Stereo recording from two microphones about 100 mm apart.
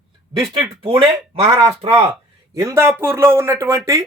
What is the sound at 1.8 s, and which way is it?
Speech, 90° right.